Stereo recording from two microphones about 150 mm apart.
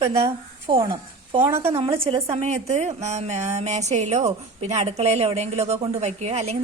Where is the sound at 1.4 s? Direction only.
15° right (ahead or behind).